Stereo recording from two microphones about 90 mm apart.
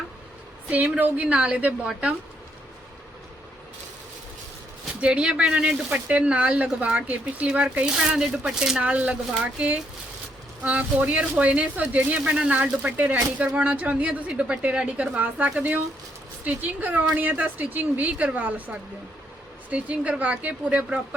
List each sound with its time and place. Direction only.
0.7 s speech: 15° right (ahead or behind)
4.9 s speech: 10° right (ahead or behind)